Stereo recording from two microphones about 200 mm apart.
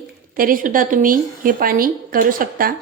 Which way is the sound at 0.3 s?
45° right (ahead or behind).